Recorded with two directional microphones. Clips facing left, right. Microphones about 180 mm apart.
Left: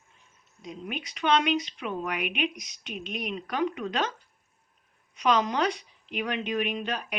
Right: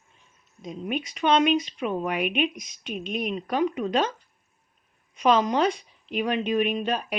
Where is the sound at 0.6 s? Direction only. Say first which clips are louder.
Right 6 dB; 20° right (ahead or behind).